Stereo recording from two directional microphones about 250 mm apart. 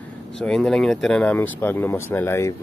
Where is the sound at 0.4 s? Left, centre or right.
Centre.